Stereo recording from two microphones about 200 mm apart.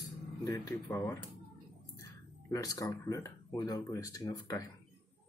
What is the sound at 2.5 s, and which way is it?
Speech, 15° left (ahead or behind).